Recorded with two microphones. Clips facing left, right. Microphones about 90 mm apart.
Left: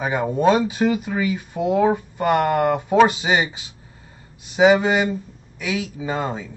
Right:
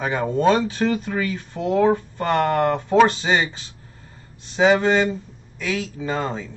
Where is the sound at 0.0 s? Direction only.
10° left (ahead or behind).